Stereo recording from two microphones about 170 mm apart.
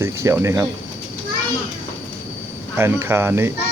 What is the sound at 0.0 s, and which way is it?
Speech, 15° right (ahead or behind).